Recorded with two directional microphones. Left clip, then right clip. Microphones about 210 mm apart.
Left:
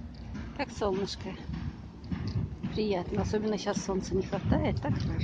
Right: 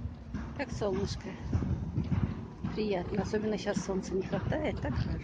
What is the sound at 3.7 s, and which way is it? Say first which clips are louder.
Speech: left 2 dB; 15° left (ahead or behind).